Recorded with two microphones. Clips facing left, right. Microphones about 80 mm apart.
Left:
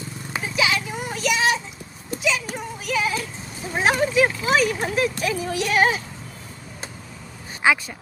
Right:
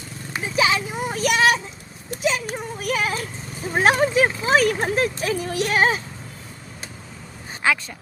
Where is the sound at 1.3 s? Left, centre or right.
Right.